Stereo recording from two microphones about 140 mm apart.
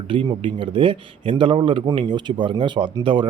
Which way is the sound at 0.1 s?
40° right (ahead or behind).